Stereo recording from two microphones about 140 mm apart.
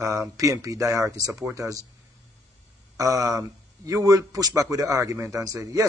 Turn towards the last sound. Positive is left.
turn(degrees=-25)  # may be behind; listen again after turning